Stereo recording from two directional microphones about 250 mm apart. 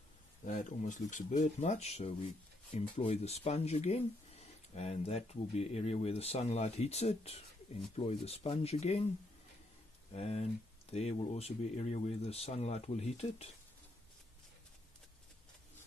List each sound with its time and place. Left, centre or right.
0.5 s speech: left
10.1 s speech: left